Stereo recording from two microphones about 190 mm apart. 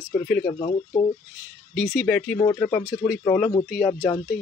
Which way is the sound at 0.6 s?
25° left (ahead or behind).